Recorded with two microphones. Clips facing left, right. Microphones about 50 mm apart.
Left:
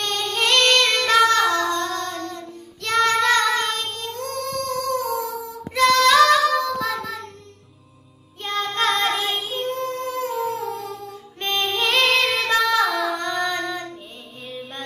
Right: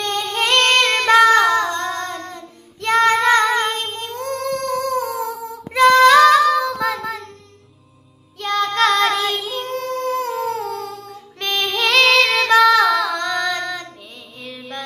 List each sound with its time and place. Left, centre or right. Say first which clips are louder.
0.0 s female singing: right 2 dB; right
2.8 s child singing: right 4 dB; right
8.4 s child singing: right 6 dB; right
9.9 s music: right 4 dB; right
11.7 s female singing: right 5 dB; right
14.4 s music: right 2 dB; right